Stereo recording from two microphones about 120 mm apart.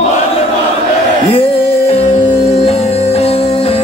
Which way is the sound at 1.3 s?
55° left (ahead or behind).